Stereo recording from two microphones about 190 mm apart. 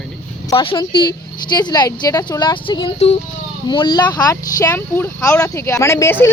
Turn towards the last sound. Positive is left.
turn(degrees=15)  # may be behind; listen again after turning